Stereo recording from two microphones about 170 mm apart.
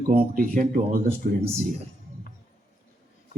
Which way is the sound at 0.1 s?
55° right (ahead or behind).